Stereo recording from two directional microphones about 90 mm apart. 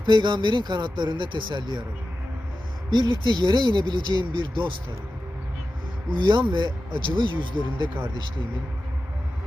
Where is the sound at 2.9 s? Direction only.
50° right (ahead or behind).